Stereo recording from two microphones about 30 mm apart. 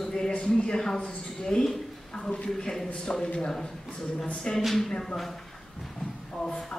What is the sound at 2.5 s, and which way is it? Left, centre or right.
Speech, centre.